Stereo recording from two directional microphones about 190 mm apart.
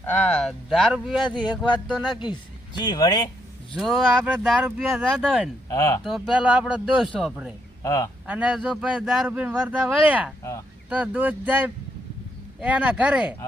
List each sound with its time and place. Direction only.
0.0 s speech: 5° left (ahead or behind)
2.0 s speech: 25° left (ahead or behind)
3.8 s speech: centre (ahead or behind)
5.6 s speech: 15° left (ahead or behind)
6.1 s speech: centre (ahead or behind)
7.8 s a man's voice: 15° left (ahead or behind)
8.3 s speech: 5° right (ahead or behind)